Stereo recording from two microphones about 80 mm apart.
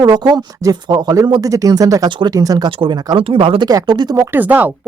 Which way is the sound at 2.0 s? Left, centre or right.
Right.